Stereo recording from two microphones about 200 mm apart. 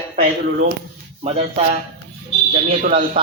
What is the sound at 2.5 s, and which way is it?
Speech, 40° right (ahead or behind).